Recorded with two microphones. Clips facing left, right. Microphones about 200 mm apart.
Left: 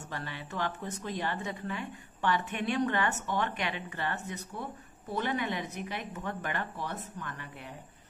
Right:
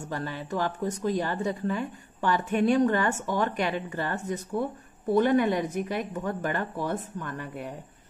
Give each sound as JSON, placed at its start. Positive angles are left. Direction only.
{"t": 0.1, "sound": "speech", "side_deg": -40}